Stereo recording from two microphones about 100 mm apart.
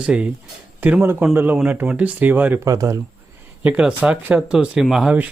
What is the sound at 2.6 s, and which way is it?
Speech, 35° right (ahead or behind).